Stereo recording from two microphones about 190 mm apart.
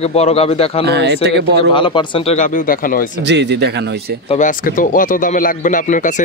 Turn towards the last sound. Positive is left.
turn(degrees=40)  # may be behind; listen again after turning